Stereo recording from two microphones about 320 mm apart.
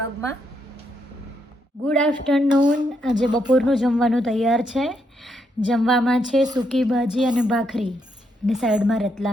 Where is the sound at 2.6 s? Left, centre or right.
Centre.